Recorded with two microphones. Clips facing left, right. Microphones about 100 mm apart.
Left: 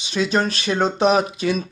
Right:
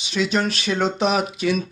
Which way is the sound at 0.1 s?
35° left (ahead or behind).